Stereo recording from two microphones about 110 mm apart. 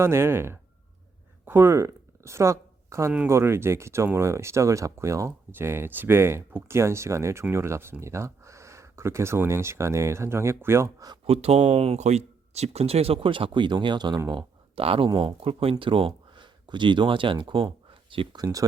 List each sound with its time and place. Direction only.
0.0 s speech: 25° right (ahead or behind)
11.3 s speech: 70° right (ahead or behind); by 14.2 s 45° right (ahead or behind)
14.8 s speech: 55° right (ahead or behind)
18.3 s speech: 35° right (ahead or behind)